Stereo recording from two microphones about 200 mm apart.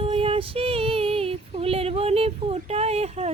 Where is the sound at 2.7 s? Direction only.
30° right (ahead or behind).